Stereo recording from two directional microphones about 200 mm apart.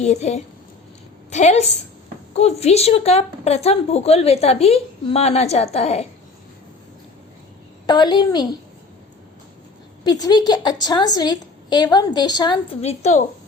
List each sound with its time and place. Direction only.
0.0 s a woman's voice: 35° left (ahead or behind)
7.9 s a woman's voice: 20° left (ahead or behind)
10.0 s a woman's voice: 20° left (ahead or behind)
12.8 s a woman's voice: 30° left (ahead or behind)